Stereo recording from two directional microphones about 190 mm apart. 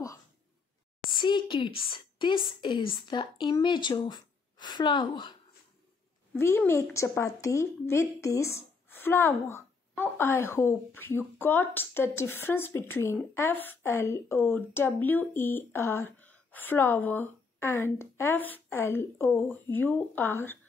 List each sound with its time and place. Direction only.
1.2 s a woman's voice: 25° left (ahead or behind)
6.3 s a woman's voice: 10° left (ahead or behind)